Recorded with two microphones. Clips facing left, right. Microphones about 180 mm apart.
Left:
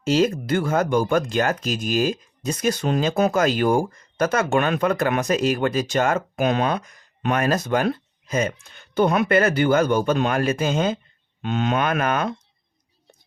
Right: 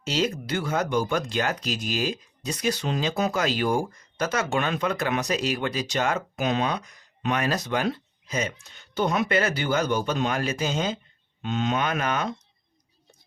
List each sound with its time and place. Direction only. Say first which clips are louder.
0.0 s speech: left 7 dB; 50° left (ahead or behind)